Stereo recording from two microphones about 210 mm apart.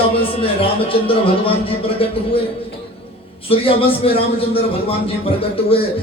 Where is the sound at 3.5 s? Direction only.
25° left (ahead or behind).